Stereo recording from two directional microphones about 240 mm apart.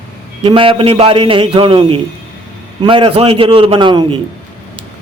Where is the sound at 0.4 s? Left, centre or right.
Right.